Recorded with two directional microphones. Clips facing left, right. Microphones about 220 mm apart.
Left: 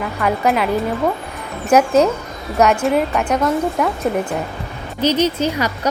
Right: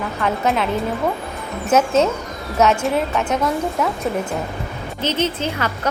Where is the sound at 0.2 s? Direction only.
5° left (ahead or behind).